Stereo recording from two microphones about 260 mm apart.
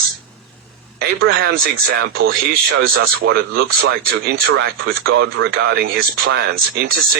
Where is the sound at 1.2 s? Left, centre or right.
Right.